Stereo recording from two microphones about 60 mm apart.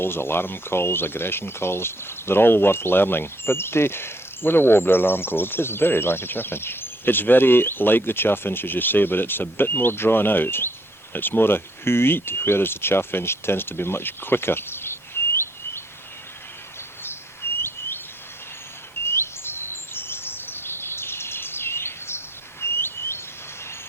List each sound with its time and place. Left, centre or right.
0.0 s speech: left
15.2 s chirp: left
17.0 s bird: left
19.0 s chirp: left